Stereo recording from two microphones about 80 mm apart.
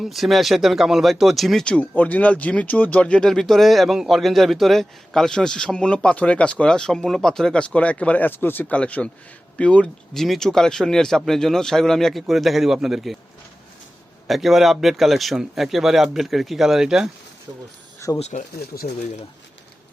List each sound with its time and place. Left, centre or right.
0.0 s a man's voice: centre
1.6 s speech: centre
8.7 s a man's voice: centre
14.3 s a man's voice: centre
18.0 s speech: left